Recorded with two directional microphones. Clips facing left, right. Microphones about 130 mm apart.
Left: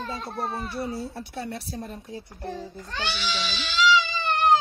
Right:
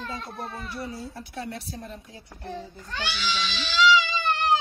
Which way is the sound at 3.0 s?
30° left (ahead or behind).